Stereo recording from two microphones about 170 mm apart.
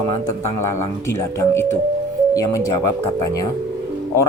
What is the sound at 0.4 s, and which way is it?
A man's voice, 15° left (ahead or behind).